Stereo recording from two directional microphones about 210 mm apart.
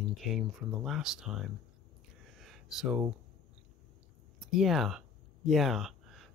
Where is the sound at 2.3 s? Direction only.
Centre (ahead or behind).